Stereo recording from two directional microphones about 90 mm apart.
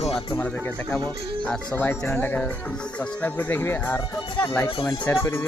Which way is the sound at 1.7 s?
25° left (ahead or behind).